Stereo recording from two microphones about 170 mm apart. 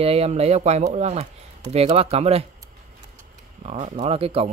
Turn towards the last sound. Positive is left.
turn(degrees=-35)  # may be behind; listen again after turning